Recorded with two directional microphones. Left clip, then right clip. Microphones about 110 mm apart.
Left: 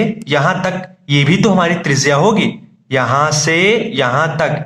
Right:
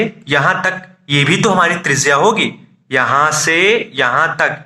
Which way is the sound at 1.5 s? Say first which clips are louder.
Right 2 dB; 20° left (ahead or behind).